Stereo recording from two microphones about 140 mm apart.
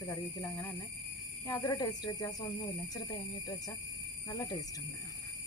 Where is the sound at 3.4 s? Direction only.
25° left (ahead or behind).